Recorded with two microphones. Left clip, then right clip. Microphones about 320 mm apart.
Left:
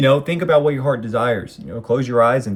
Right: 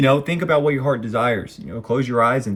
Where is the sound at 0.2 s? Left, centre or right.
Centre.